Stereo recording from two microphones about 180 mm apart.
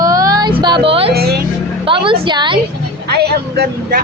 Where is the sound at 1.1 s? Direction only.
60° right (ahead or behind).